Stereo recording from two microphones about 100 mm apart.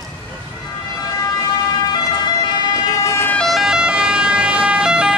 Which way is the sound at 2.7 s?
35° left (ahead or behind).